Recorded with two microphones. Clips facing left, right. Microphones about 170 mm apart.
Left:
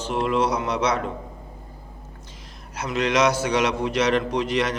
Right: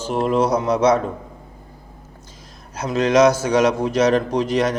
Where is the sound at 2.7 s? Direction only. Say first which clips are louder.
Right 6 dB; 45° right (ahead or behind).